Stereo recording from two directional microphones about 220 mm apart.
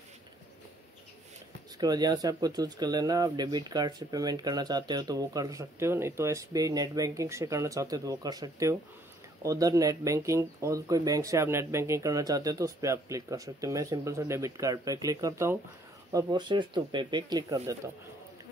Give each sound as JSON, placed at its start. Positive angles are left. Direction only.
{"t": 1.8, "sound": "speech", "side_deg": -20}